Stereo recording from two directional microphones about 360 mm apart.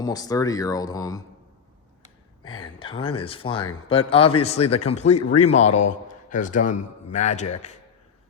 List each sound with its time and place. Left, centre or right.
0.0 s speech: centre
2.5 s a man's voice: centre